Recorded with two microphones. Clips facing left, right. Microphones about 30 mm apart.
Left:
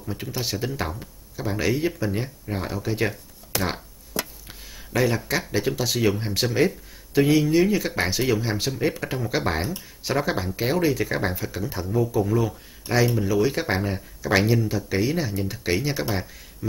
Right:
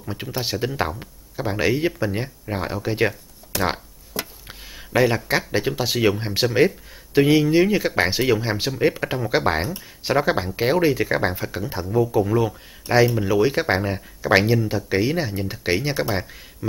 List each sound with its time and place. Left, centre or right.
0.0 s speech: right
3.6 s a sound: centre
5.8 s speech: right